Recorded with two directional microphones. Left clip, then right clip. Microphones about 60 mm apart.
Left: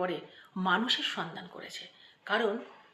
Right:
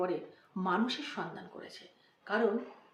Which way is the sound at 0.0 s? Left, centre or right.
Centre.